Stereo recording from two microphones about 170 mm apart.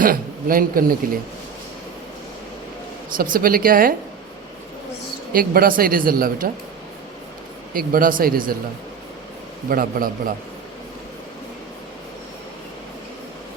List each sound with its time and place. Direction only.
0.0 s a man's voice: 55° right (ahead or behind)
3.2 s speech: 55° right (ahead or behind)
5.3 s speech: 55° right (ahead or behind)
7.7 s speech: 55° right (ahead or behind)
9.6 s speech: 55° right (ahead or behind)